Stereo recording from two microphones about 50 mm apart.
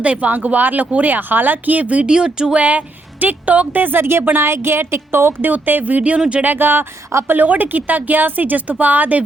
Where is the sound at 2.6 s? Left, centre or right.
Right.